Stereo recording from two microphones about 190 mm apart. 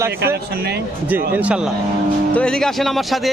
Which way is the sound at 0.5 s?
55° right (ahead or behind).